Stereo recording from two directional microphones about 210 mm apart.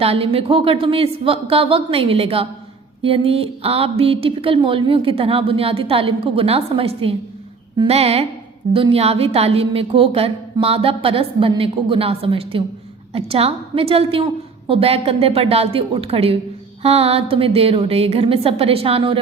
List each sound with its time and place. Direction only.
0.0 s a woman's voice: 30° right (ahead or behind)